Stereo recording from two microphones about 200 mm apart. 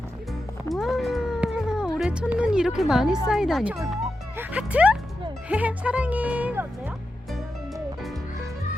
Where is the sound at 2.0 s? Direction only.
5° right (ahead or behind).